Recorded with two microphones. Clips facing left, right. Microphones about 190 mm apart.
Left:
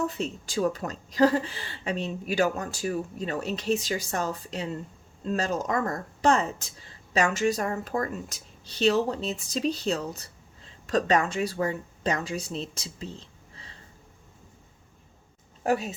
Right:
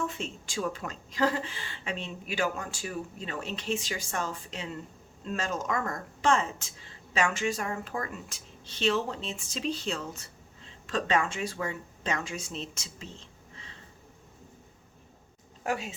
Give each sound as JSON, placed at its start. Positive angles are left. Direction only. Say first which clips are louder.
{"t": 0.0, "sound": "speech", "louder": "left 5 dB", "side_deg": 40}
{"t": 15.6, "sound": "speech", "louder": "left 6 dB", "side_deg": 40}